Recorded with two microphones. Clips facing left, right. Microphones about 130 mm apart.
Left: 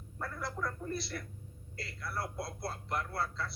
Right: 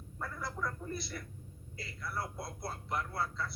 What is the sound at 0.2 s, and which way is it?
Speech, centre (ahead or behind).